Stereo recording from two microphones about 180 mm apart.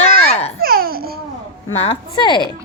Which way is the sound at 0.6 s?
55° right (ahead or behind).